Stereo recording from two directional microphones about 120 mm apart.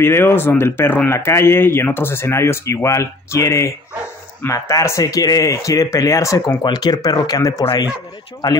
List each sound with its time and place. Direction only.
0.0 s speech: 20° left (ahead or behind)